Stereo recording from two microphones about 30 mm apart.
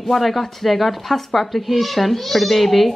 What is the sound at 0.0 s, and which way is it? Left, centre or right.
Speech, centre.